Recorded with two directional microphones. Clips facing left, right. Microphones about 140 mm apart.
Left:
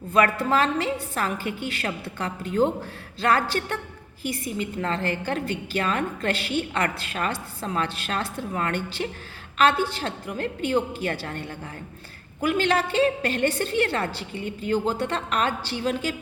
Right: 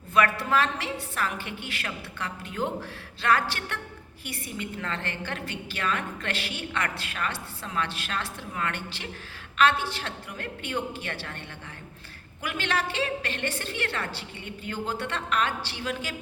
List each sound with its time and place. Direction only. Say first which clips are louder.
0.1 s a woman's voice: left 3 dB; 30° left (ahead or behind)